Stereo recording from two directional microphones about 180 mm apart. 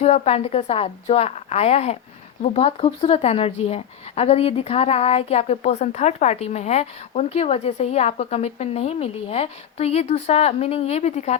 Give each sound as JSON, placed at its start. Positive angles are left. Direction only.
{"t": 0.0, "sound": "speech", "side_deg": 35}